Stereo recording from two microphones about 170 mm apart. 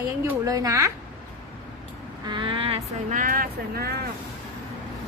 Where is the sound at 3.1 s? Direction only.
50° right (ahead or behind).